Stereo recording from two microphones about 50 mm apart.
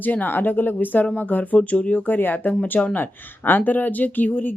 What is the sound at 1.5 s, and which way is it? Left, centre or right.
Speech, left.